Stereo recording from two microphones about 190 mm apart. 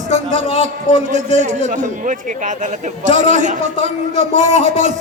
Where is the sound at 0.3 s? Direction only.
40° right (ahead or behind).